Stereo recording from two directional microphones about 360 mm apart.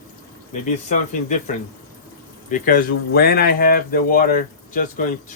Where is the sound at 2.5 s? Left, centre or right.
Left.